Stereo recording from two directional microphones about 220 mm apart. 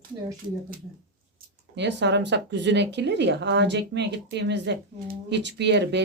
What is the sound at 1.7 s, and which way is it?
Speech, 50° right (ahead or behind).